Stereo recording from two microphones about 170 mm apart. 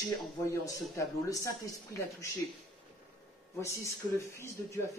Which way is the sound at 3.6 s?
15° left (ahead or behind).